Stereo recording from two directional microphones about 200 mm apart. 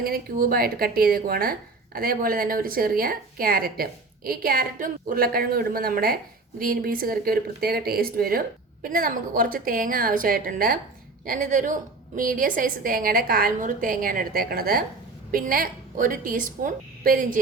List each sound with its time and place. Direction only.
0.0 s speech: 50° right (ahead or behind)